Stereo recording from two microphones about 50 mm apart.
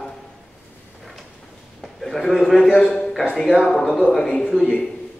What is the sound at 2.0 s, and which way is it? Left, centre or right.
A man's voice, centre.